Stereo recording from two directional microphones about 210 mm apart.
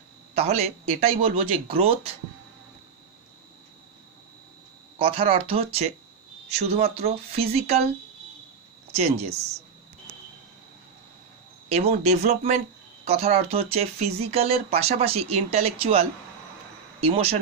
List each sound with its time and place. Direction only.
0.3 s speech: 30° right (ahead or behind)
4.9 s speech: 25° right (ahead or behind)
8.9 s speech: 30° right (ahead or behind)
11.7 s speech: 30° right (ahead or behind)